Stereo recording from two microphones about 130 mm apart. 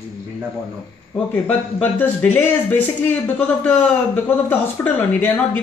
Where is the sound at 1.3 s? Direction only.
15° left (ahead or behind).